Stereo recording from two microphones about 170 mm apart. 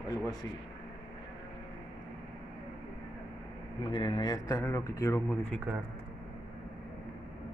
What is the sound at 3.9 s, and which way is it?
Speech, 25° left (ahead or behind).